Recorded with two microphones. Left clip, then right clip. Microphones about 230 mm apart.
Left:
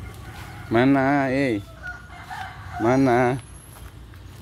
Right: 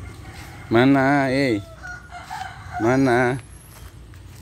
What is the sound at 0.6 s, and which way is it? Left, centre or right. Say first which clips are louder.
Speech: right 2 dB; centre.